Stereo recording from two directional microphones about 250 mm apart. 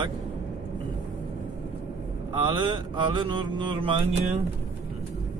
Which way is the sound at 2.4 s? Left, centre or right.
Centre.